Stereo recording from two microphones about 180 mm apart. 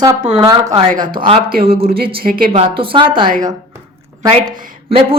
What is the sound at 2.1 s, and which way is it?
Speech, 55° right (ahead or behind).